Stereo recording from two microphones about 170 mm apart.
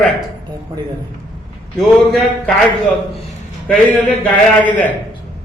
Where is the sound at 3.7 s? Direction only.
10° left (ahead or behind).